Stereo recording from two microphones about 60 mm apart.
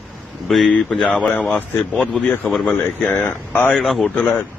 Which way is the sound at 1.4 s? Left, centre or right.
Left.